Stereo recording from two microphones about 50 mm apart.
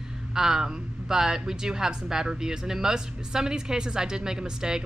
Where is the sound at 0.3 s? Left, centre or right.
Centre.